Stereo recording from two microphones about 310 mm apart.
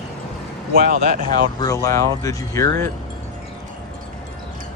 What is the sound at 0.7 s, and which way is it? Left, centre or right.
Speech, right.